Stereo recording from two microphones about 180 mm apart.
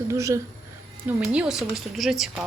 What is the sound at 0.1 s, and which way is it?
Speech, 15° right (ahead or behind).